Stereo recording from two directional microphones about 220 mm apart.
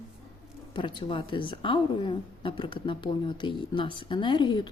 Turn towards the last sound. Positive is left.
turn(degrees=20)  # may be behind; listen again after turning